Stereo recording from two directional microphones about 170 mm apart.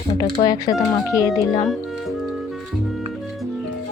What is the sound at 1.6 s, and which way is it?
Speech, centre (ahead or behind).